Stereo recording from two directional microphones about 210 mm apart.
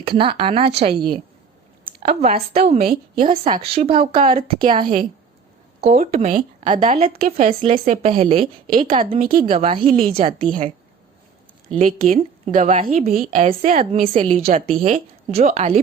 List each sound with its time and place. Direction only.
0.0 s speech: 25° right (ahead or behind)
1.8 s a woman's voice: 30° right (ahead or behind)
11.7 s a woman's voice: 30° right (ahead or behind)